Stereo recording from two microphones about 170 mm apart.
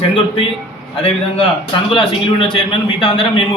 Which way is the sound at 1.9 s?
30° left (ahead or behind).